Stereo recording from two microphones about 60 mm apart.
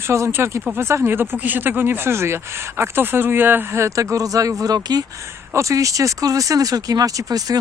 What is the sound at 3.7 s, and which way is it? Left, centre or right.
Speech, right.